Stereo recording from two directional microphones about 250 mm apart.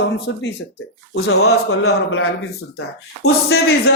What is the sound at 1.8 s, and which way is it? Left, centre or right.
Speech, left.